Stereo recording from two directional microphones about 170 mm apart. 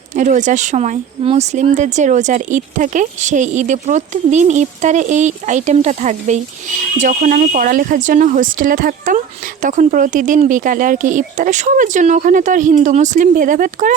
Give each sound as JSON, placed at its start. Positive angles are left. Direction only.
{"t": 0.1, "sound": "speech", "side_deg": -45}